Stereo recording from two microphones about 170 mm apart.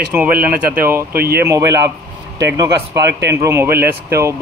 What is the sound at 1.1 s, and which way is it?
Speech, 65° right (ahead or behind).